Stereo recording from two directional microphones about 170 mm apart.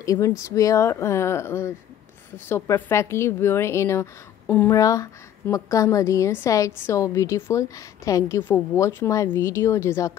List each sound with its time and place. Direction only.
0.0 s a woman's voice: 20° left (ahead or behind)